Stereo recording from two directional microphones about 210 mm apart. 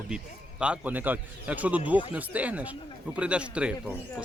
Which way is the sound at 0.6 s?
5° right (ahead or behind).